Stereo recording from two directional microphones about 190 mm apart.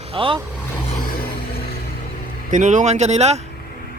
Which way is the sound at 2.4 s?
40° right (ahead or behind).